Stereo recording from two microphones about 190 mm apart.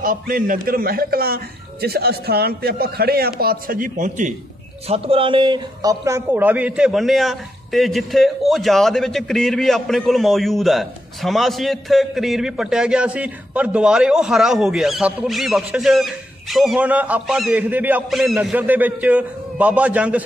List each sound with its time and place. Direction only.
0.0 s a man's voice: 45° right (ahead or behind)
4.8 s a man's voice: 30° right (ahead or behind); by 20.2 s 10° right (ahead or behind)